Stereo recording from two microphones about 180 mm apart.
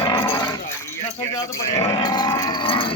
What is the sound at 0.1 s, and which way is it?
Sheep, 15° left (ahead or behind).